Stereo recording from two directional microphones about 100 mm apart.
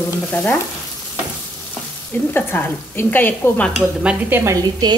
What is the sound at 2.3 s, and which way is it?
Stir, 20° left (ahead or behind).